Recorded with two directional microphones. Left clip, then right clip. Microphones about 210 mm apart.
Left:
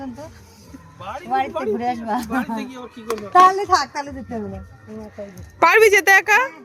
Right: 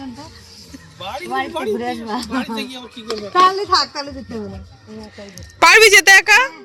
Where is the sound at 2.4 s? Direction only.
55° right (ahead or behind).